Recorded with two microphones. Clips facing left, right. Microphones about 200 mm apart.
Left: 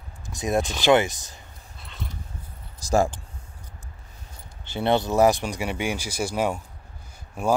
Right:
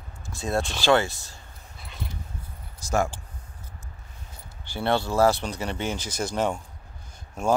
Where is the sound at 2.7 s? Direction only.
35° left (ahead or behind).